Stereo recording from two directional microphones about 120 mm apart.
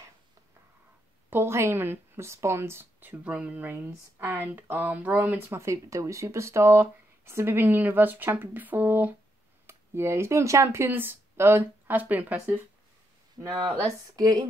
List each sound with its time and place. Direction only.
1.3 s a woman's voice: 20° right (ahead or behind)
13.4 s speech: 35° right (ahead or behind)